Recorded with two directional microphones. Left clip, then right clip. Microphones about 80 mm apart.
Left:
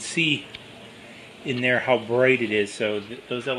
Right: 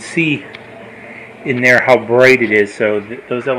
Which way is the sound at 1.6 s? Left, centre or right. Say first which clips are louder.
Right 12 dB; centre.